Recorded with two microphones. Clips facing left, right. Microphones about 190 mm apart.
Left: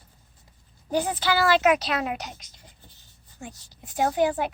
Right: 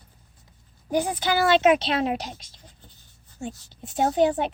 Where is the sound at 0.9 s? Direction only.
15° right (ahead or behind).